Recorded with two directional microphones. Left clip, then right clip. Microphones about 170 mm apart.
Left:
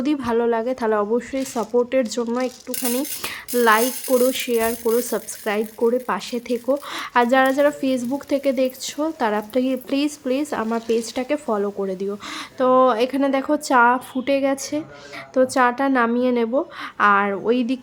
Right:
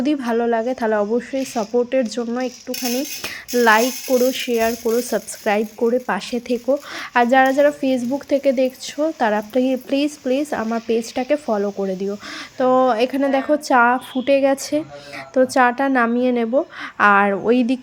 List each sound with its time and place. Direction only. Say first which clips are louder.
0.0 s speech: right 1 dB; 10° right (ahead or behind)
3.5 s speech: right 2 dB; 15° right (ahead or behind)
17.0 s speech: right 3 dB; 20° right (ahead or behind)